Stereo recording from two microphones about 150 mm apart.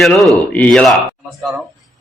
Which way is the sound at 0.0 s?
Centre (ahead or behind).